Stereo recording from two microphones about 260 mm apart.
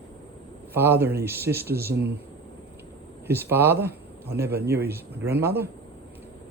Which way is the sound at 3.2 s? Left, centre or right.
Centre.